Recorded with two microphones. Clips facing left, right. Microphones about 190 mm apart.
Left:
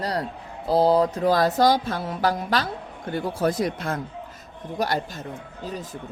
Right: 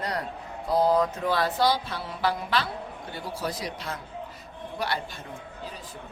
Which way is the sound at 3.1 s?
50° left (ahead or behind).